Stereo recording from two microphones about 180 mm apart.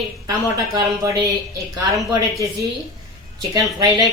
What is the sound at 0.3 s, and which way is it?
Speech, 20° right (ahead or behind).